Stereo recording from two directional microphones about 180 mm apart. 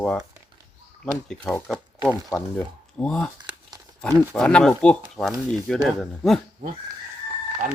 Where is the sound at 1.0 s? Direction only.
5° left (ahead or behind).